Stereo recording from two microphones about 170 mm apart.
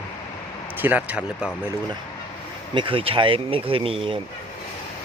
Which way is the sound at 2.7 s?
30° right (ahead or behind).